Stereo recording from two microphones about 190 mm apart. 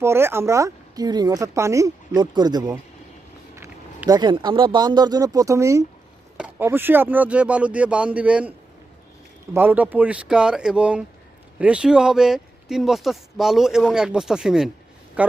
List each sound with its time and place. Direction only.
0.0 s speech: 15° right (ahead or behind)